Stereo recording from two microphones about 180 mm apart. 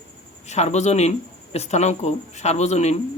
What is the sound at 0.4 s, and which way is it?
Speech, 40° left (ahead or behind).